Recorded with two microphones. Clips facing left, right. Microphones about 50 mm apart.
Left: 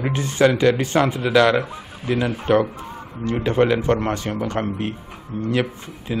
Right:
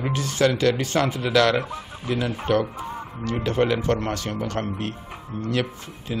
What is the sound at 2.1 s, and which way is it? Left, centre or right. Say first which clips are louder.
A man's voice: left 4 dB; left.